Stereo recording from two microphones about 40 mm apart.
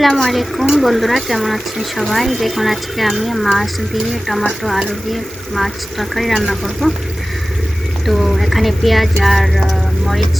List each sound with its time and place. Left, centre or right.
0.0 s speech: centre
8.0 s speech: centre